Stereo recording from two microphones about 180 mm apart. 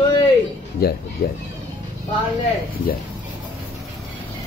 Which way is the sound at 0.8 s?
60° left (ahead or behind).